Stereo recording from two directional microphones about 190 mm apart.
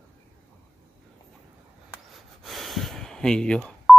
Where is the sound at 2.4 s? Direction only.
Centre (ahead or behind).